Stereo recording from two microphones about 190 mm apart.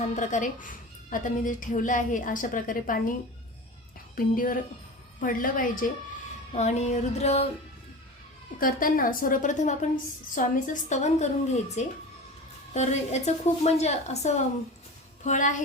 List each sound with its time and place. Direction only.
0.2 s a woman's voice: 40° left (ahead or behind)
4.1 s a woman's voice: 50° left (ahead or behind)
8.5 s a woman's voice: 50° left (ahead or behind)